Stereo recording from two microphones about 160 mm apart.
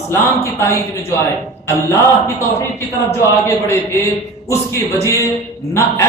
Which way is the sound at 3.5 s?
15° left (ahead or behind).